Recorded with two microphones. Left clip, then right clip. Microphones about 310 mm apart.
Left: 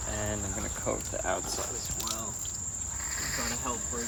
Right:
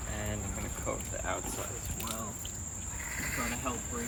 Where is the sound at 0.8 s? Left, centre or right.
Left.